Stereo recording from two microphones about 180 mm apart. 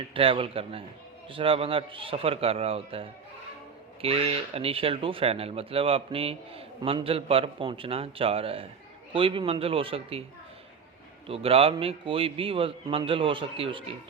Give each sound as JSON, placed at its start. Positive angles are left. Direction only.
{"t": 0.1, "sound": "speech", "side_deg": -30}
{"t": 11.3, "sound": "speech", "side_deg": -30}